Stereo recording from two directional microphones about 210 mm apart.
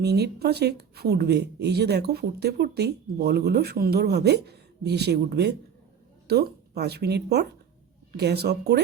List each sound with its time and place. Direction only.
0.0 s speech: 50° right (ahead or behind)